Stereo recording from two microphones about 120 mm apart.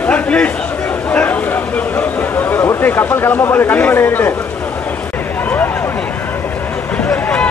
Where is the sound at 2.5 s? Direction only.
20° left (ahead or behind).